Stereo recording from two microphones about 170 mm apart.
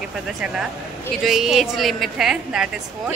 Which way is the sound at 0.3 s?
5° right (ahead or behind).